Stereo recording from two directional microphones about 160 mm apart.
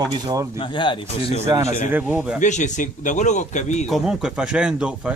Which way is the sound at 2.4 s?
50° left (ahead or behind).